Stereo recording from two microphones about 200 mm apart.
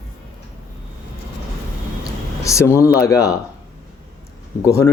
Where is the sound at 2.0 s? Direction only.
15° left (ahead or behind).